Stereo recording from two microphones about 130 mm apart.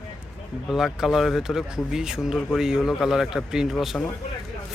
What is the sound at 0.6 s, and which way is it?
Speech, centre (ahead or behind).